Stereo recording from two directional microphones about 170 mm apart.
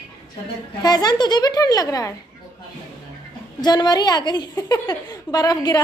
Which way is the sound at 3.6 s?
25° left (ahead or behind).